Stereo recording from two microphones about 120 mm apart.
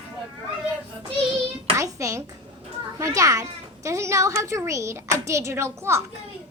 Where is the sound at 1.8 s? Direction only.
25° right (ahead or behind).